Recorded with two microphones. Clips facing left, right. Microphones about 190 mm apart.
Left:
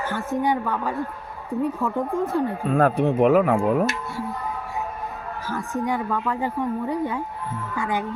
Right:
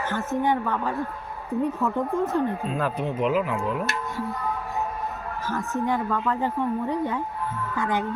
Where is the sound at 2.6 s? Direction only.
55° left (ahead or behind).